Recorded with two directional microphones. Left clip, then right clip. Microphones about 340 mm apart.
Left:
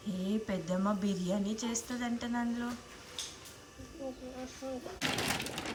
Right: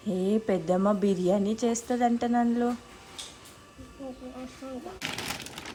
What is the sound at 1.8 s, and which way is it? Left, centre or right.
Speech, right.